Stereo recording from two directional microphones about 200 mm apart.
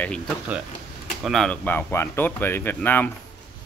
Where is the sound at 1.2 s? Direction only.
Centre (ahead or behind).